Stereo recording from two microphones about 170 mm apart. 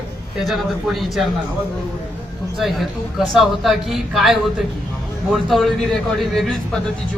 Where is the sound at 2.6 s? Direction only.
Centre (ahead or behind).